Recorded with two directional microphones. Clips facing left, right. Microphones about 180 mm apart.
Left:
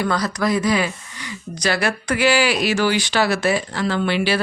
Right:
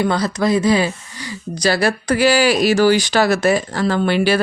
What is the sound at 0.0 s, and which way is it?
A woman's voice, 25° right (ahead or behind).